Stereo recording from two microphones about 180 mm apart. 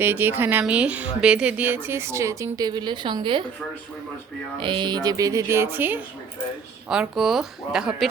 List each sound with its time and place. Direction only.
0.0 s speech: 10° right (ahead or behind); by 3.4 s 25° right (ahead or behind)
4.6 s speech: 25° right (ahead or behind); by 8.0 s 5° right (ahead or behind)